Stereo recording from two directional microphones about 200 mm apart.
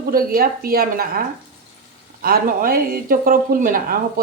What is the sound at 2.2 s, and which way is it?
Speech, 45° right (ahead or behind).